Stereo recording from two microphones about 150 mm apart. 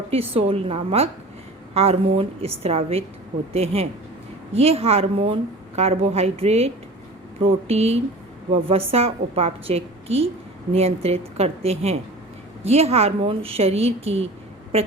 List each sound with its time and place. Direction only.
0.1 s a woman's voice: 40° right (ahead or behind)